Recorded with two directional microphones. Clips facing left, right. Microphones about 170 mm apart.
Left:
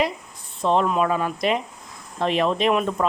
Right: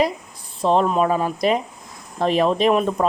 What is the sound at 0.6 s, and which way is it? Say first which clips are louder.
Speech: right 2 dB; 35° right (ahead or behind).